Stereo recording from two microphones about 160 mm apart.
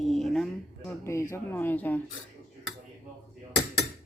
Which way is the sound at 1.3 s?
15° left (ahead or behind).